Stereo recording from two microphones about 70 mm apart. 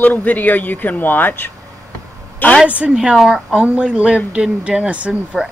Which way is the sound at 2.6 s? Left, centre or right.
Centre.